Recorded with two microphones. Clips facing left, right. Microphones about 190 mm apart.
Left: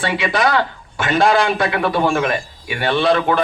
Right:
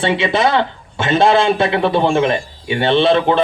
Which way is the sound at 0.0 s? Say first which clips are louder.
Right 3 dB; 25° right (ahead or behind).